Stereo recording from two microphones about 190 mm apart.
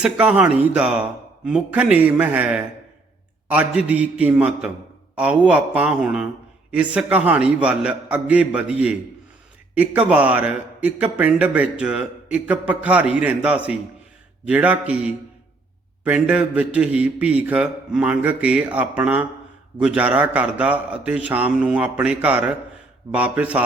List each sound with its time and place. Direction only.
0.0 s a man's voice: 5° right (ahead or behind)